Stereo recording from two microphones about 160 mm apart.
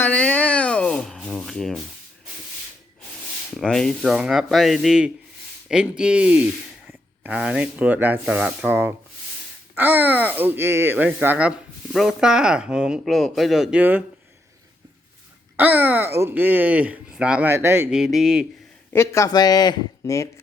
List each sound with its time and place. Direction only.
0.0 s rub: 10° left (ahead or behind)
3.5 s speech: 5° left (ahead or behind)
15.5 s speech: 10° right (ahead or behind)
17.9 s speech: 5° right (ahead or behind)
18.9 s speech: 20° left (ahead or behind)